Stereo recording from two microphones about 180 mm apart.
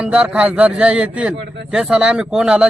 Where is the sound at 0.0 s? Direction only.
5° right (ahead or behind).